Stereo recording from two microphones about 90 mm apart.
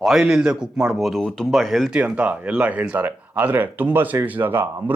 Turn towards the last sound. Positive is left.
turn(degrees=-20)  # may be behind; listen again after turning